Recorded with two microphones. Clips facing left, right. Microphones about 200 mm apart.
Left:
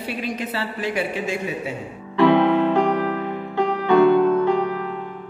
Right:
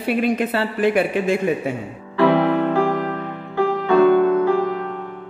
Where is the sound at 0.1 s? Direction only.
55° right (ahead or behind).